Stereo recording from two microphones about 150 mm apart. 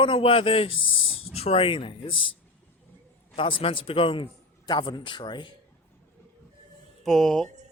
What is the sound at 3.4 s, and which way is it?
A man's voice, 35° left (ahead or behind).